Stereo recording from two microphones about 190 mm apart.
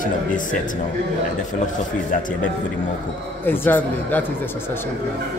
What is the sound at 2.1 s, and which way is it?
Speech, 45° left (ahead or behind).